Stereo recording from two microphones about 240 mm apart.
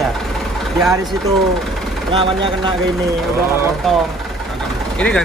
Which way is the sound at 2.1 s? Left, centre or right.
Right.